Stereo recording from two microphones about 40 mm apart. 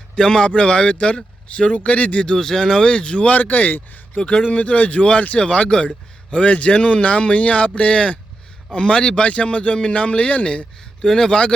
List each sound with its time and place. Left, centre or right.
0.2 s speech: centre
2.2 s speech: centre; by 4.2 s left
4.2 s speech: left
5.4 s speech: left
11.0 s speech: centre